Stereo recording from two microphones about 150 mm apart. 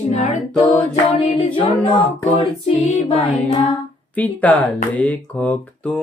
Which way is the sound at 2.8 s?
10° left (ahead or behind).